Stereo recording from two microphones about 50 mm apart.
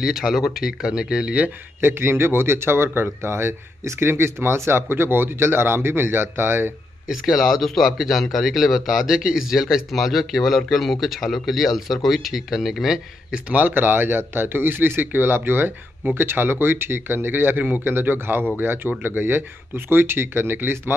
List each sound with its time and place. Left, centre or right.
0.0 s speech: centre
1.8 s speech: right
4.1 s speech: right
7.1 s speech: centre
13.5 s speech: right